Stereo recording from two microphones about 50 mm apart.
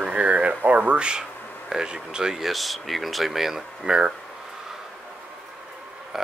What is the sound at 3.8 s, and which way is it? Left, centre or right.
Speech, centre.